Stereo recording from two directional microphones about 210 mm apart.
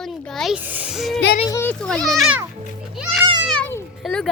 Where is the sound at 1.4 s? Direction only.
10° left (ahead or behind).